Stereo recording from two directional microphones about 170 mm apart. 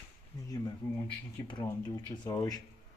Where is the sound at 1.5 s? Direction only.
25° left (ahead or behind).